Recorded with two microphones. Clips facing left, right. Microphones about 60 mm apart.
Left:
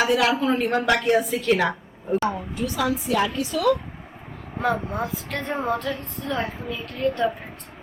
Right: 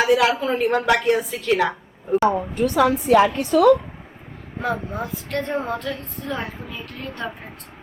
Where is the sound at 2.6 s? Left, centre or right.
Right.